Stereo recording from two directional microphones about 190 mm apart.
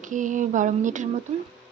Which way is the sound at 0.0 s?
40° right (ahead or behind).